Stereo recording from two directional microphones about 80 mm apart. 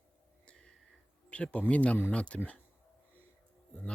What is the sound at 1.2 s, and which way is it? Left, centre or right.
Speech, centre.